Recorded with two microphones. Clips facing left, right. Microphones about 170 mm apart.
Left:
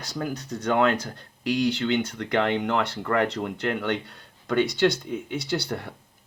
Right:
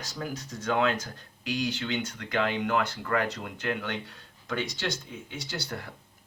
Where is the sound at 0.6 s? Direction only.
60° left (ahead or behind).